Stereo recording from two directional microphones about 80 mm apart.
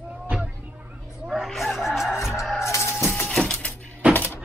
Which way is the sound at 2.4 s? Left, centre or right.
Centre.